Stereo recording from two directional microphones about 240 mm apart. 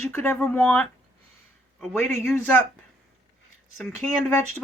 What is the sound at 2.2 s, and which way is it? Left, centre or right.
Speech, centre.